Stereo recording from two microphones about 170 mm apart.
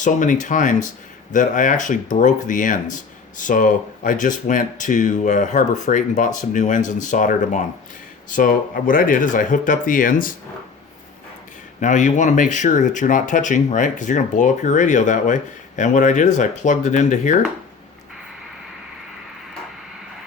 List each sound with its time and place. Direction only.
0.0 s speech: 50° left (ahead or behind)
11.8 s speech: 45° left (ahead or behind)